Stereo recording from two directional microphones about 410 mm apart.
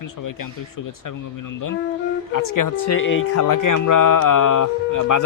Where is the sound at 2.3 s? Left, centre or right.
Left.